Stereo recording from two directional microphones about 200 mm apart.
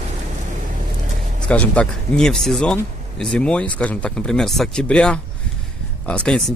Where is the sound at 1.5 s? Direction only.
5° left (ahead or behind).